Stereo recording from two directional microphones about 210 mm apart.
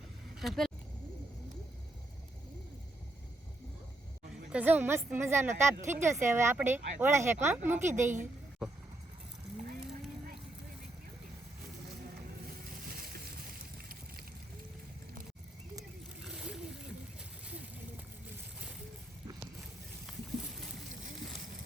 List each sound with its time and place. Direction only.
0.3 s speech: centre (ahead or behind)
4.5 s speech: 10° right (ahead or behind)
8.6 s vehicle: centre (ahead or behind)
13.0 s a sound: 45° right (ahead or behind)
16.2 s splash: 5° right (ahead or behind)